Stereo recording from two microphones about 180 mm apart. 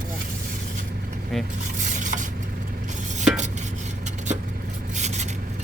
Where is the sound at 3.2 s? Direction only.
40° right (ahead or behind).